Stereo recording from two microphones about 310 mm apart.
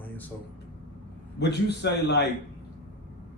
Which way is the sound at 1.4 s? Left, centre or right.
Left.